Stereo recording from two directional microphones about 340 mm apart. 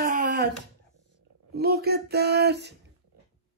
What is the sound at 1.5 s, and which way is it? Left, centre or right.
Speech, right.